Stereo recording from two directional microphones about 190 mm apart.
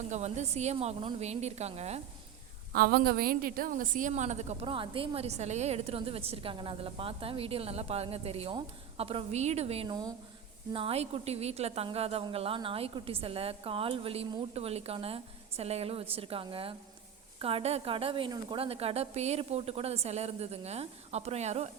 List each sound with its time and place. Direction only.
0.1 s a woman's voice: 35° right (ahead or behind)
2.7 s a woman's voice: 50° right (ahead or behind); by 21.7 s 35° right (ahead or behind)